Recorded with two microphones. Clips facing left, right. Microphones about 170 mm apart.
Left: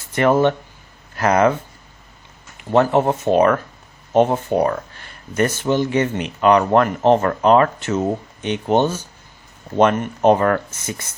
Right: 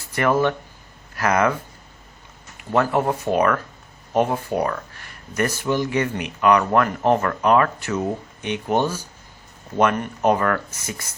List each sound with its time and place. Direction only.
0.1 s speech: 25° left (ahead or behind)
2.7 s speech: 25° left (ahead or behind)